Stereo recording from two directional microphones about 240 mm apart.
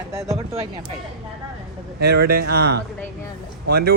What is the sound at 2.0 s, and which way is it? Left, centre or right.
A man's voice, right.